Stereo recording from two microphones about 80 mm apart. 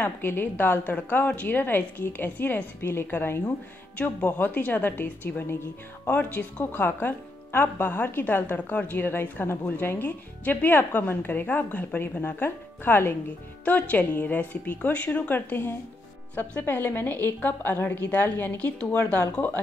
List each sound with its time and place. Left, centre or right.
0.0 s speech: left